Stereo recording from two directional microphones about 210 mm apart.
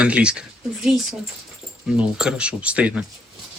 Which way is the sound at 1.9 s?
5° right (ahead or behind).